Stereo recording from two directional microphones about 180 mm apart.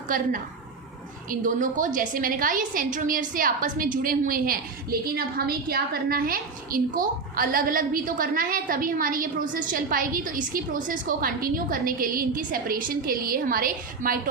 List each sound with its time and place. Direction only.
0.1 s a woman's voice: 50° right (ahead or behind)
1.3 s a woman's voice: 45° right (ahead or behind)